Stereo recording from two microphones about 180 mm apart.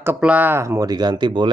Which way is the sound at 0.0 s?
10° right (ahead or behind).